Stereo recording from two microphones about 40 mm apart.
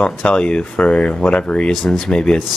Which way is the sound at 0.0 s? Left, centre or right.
Left.